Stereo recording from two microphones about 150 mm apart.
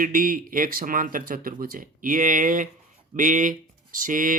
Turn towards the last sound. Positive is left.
turn(degrees=-65)  # may be behind; listen again after turning